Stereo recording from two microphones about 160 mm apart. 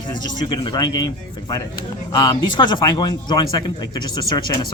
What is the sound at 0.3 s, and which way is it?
Speech, 30° left (ahead or behind).